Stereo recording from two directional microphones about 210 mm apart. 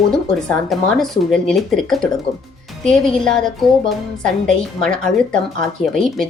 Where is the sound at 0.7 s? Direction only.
Centre (ahead or behind).